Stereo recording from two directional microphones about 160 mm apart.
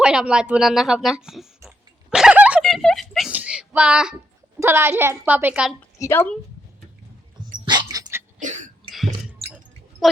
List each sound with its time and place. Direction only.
0.0 s a sound: 5° right (ahead or behind)
4.6 s a woman's voice: 15° right (ahead or behind)
6.0 s speech: 15° left (ahead or behind)
7.6 s dog: 25° right (ahead or behind)
8.4 s cough: 55° right (ahead or behind)